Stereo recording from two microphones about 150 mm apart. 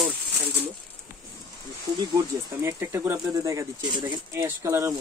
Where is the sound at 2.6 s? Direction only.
15° right (ahead or behind).